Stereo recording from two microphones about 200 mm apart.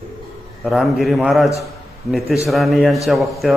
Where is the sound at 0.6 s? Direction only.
Centre (ahead or behind).